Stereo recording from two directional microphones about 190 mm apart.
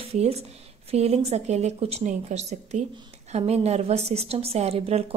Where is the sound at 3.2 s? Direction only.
35° right (ahead or behind).